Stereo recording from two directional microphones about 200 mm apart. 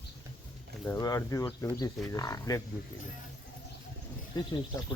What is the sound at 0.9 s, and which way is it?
Speech, 15° left (ahead or behind).